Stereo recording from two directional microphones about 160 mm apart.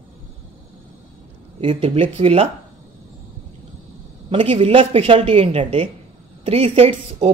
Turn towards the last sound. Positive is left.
turn(degrees=-35)  # may be behind; listen again after turning